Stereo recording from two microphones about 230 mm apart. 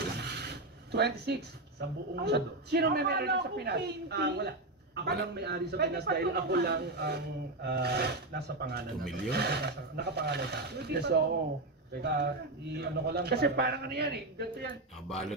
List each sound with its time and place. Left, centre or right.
0.2 s vehicle: right
0.9 s a man's voice: right
15.0 s speech: centre